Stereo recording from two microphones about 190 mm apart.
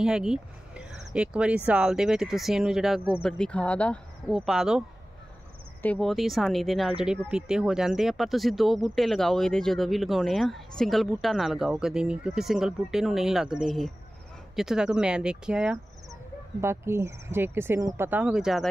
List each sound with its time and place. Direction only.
0.0 s speech: 5° right (ahead or behind)